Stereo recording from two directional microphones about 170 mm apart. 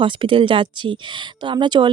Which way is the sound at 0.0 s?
30° right (ahead or behind).